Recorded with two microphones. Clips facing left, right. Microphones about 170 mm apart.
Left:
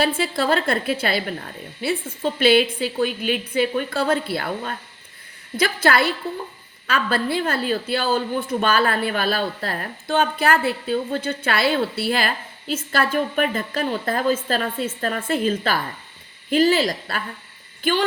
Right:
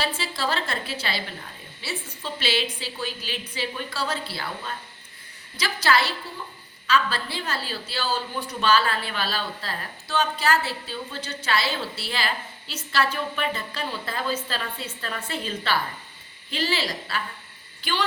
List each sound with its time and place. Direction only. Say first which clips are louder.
0.0 s a woman's voice: left 7 dB; 55° left (ahead or behind)